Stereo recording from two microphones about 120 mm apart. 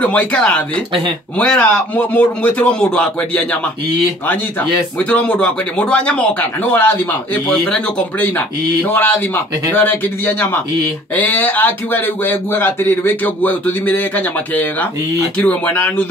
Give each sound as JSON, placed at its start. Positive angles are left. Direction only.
{"t": 0.0, "sound": "speech", "side_deg": 10}
{"t": 4.9, "sound": "speech", "side_deg": 10}